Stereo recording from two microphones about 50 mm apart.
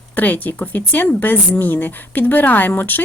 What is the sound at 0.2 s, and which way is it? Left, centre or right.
Speech, left.